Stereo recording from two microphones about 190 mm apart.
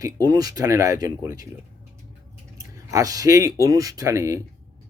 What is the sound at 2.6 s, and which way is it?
Speech, 15° right (ahead or behind).